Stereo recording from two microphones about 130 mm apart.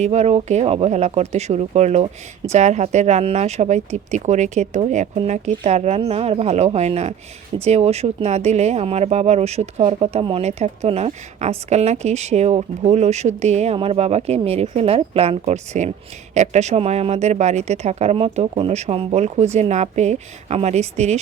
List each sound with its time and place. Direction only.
0.0 s speech: 60° right (ahead or behind)